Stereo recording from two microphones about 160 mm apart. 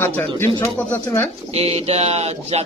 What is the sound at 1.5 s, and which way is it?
A man's voice, 40° right (ahead or behind).